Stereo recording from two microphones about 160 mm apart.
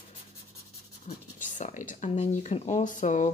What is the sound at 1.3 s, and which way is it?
Speech, 50° left (ahead or behind).